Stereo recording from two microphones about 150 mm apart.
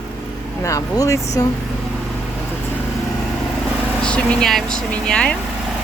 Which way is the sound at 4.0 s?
5° left (ahead or behind).